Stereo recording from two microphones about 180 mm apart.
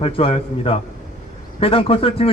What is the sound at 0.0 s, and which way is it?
A man's voice, 30° left (ahead or behind).